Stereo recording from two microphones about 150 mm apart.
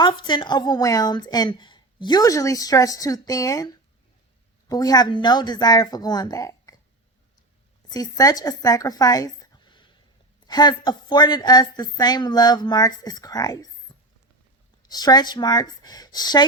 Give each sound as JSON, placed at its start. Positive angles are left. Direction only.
{"t": 0.0, "sound": "a woman's voice", "side_deg": 30}
{"t": 4.7, "sound": "a woman's voice", "side_deg": 25}
{"t": 7.9, "sound": "a woman's voice", "side_deg": 25}
{"t": 13.9, "sound": "a sound", "side_deg": 30}
{"t": 14.8, "sound": "a woman's voice", "side_deg": 25}